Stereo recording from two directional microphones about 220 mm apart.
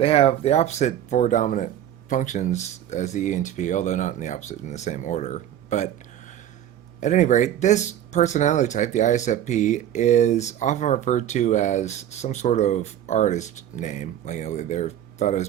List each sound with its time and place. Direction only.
0.0 s speech: 25° left (ahead or behind)
7.0 s speech: 35° left (ahead or behind)